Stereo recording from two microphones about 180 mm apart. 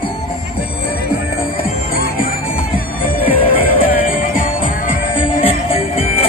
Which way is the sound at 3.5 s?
55° left (ahead or behind).